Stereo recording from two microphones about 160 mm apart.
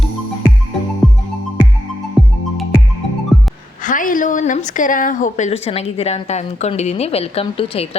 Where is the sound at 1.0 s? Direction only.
Centre (ahead or behind).